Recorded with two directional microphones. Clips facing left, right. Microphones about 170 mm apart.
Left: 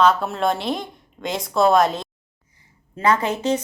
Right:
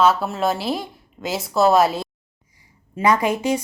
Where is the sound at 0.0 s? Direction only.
5° right (ahead or behind).